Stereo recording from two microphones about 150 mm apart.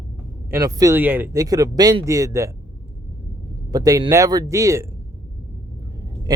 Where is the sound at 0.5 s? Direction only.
20° right (ahead or behind).